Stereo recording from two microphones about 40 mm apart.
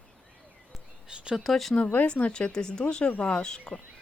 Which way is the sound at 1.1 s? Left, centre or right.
Right.